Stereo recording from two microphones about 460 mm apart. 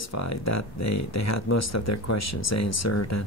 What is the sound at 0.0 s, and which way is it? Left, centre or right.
Speech, left.